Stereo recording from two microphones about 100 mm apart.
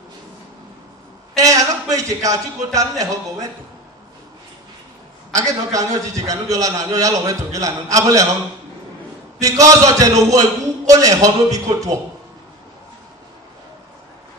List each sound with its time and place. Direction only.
1.3 s a man's voice: 35° right (ahead or behind)
5.3 s a man's voice: 35° right (ahead or behind)
9.4 s a man's voice: 35° right (ahead or behind)